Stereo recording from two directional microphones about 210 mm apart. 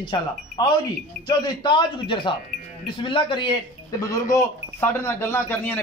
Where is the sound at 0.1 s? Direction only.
20° left (ahead or behind).